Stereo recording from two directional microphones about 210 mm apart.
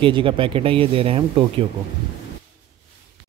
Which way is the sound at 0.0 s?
25° right (ahead or behind).